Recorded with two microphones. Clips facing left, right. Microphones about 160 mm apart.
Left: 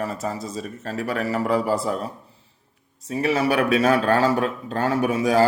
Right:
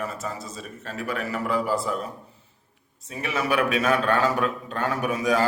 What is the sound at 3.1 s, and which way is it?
A man's voice, 35° left (ahead or behind).